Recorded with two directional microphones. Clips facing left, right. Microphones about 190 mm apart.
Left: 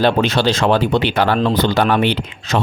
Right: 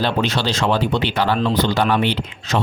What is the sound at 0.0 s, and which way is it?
Speech, 55° left (ahead or behind).